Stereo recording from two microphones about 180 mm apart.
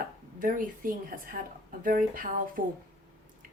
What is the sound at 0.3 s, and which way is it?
A woman's voice, 50° right (ahead or behind).